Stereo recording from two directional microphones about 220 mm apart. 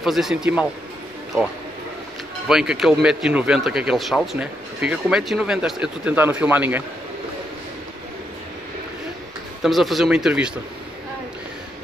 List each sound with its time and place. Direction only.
0.0 s a man's voice: centre (ahead or behind)
2.4 s a man's voice: 5° right (ahead or behind)
9.6 s a man's voice: centre (ahead or behind)